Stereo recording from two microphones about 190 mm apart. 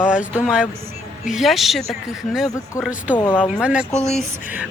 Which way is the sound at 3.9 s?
35° left (ahead or behind).